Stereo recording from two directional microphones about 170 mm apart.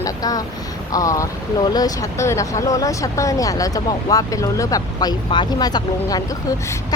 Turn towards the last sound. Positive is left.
turn(degrees=25)  # may be behind; listen again after turning